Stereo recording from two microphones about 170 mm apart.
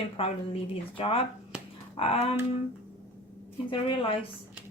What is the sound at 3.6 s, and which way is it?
Speech, 30° left (ahead or behind).